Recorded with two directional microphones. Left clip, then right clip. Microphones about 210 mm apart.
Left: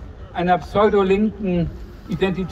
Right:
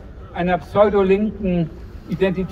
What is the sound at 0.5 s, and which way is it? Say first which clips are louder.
Speech: right 1 dB; 30° left (ahead or behind).